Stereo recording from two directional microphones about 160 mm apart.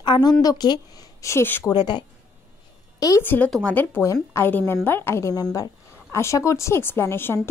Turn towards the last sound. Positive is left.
turn(degrees=15)  # may be behind; listen again after turning